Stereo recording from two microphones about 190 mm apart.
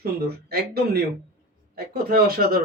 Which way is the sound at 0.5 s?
55° right (ahead or behind).